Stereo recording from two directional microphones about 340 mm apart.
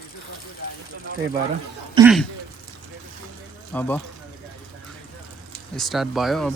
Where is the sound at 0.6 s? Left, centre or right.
Left.